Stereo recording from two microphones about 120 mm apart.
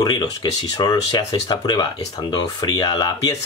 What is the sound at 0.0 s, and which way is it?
Speech, 35° left (ahead or behind).